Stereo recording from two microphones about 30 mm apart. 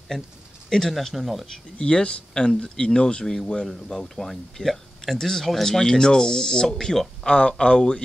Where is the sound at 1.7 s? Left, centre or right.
Left.